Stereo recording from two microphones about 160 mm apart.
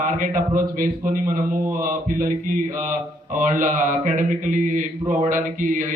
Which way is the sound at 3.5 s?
55° right (ahead or behind).